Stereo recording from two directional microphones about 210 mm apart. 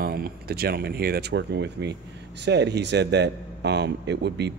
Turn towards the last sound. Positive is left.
turn(degrees=-55)  # may be behind; listen again after turning